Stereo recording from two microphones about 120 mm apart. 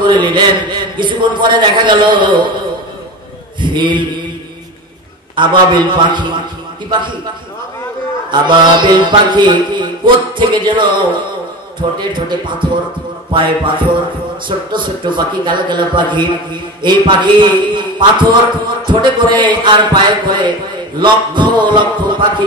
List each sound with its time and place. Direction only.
0.0 s music: 40° right (ahead or behind)
3.6 s music: 40° right (ahead or behind)
5.3 s music: 40° right (ahead or behind)
8.3 s music: 40° right (ahead or behind)
12.0 s music: 40° right (ahead or behind)